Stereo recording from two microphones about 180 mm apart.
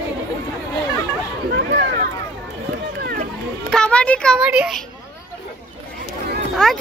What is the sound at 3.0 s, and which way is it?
Run, 60° right (ahead or behind).